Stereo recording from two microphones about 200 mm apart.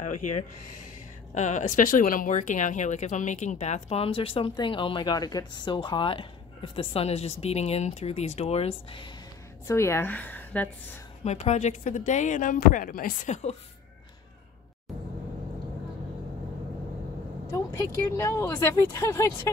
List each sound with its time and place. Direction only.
0.2 s speech: 40° left (ahead or behind)
9.7 s speech: 15° left (ahead or behind)
11.2 s speech: 35° left (ahead or behind)
17.5 s speech: 15° left (ahead or behind)